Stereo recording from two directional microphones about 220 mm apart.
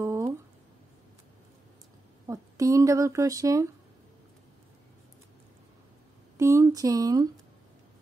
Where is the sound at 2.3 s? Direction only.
15° right (ahead or behind).